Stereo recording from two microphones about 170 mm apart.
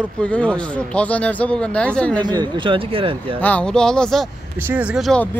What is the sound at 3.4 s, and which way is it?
Speech, 10° left (ahead or behind).